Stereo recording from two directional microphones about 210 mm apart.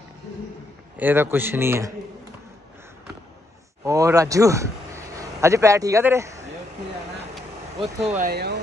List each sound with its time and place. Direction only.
0.9 s a man's voice: 10° right (ahead or behind)
3.8 s speech: 15° right (ahead or behind)
8.2 s speech: 50° right (ahead or behind)